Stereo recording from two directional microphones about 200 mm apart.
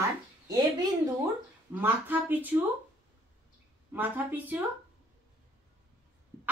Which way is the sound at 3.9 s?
10° right (ahead or behind).